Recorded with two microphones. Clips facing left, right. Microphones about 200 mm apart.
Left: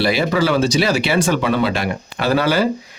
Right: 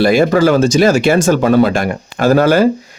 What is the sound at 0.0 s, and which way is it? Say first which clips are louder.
Speech: right 7 dB; 50° right (ahead or behind).